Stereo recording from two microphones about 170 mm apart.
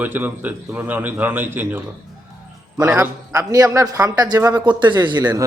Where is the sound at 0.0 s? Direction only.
10° right (ahead or behind).